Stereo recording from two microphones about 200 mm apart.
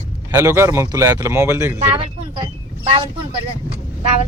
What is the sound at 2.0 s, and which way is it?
Speech, 25° right (ahead or behind).